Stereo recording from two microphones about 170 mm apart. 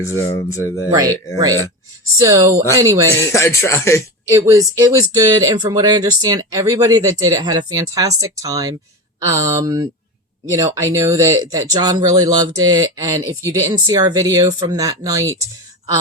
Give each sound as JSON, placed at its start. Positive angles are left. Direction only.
{"t": 0.0, "sound": "speech", "side_deg": 15}
{"t": 0.9, "sound": "speech", "side_deg": -20}
{"t": 2.1, "sound": "speech", "side_deg": -20}
{"t": 3.2, "sound": "speech", "side_deg": 15}
{"t": 4.3, "sound": "speech", "side_deg": -20}